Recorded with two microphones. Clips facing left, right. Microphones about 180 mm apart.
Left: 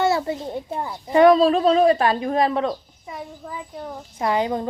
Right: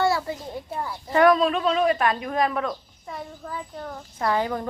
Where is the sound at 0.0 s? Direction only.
25° left (ahead or behind).